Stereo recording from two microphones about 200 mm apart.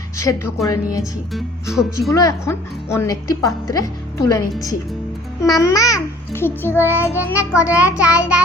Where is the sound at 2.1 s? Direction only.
15° left (ahead or behind).